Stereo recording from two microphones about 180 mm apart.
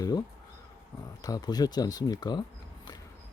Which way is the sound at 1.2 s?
20° left (ahead or behind).